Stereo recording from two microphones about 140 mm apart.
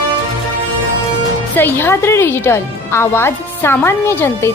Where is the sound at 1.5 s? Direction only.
15° left (ahead or behind).